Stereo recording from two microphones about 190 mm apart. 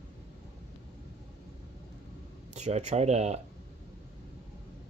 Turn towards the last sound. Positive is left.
turn(degrees=-35)  # may be behind; listen again after turning